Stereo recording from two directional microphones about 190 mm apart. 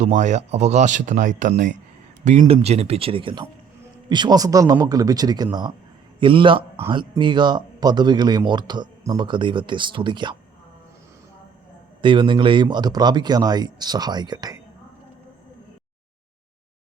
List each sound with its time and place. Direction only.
0.0 s speech: 40° right (ahead or behind)
2.4 s speech: 30° right (ahead or behind)
12.0 s speech: 25° right (ahead or behind)